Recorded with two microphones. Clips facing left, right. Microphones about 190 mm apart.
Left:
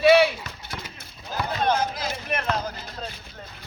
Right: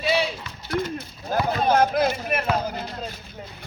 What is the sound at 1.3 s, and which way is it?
Speech, 50° right (ahead or behind).